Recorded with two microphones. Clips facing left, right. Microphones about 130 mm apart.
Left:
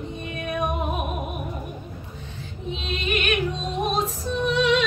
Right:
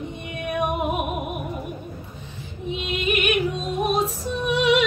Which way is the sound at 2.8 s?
10° right (ahead or behind).